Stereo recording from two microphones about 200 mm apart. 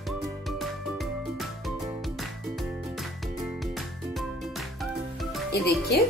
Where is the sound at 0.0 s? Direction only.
Centre (ahead or behind).